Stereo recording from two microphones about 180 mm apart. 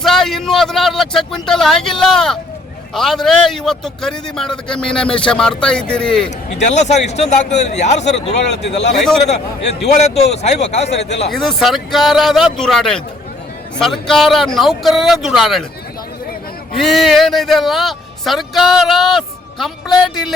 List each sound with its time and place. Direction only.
0.0 s a man's voice: centre (ahead or behind)
6.6 s speech: 40° left (ahead or behind)
11.3 s a man's voice: centre (ahead or behind)
16.7 s a man's voice: centre (ahead or behind)